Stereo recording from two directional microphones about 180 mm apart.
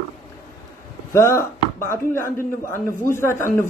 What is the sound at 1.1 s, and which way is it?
Speech, 15° left (ahead or behind).